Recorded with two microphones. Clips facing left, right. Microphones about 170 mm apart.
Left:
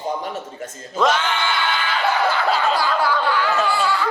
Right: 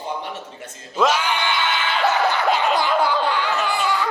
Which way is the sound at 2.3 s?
20° right (ahead or behind).